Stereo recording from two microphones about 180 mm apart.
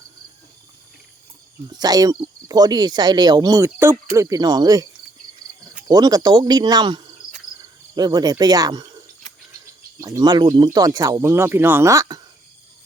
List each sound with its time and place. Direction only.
1.8 s speech: 20° right (ahead or behind)
5.9 s speech: 20° right (ahead or behind)
10.0 s speech: 20° right (ahead or behind)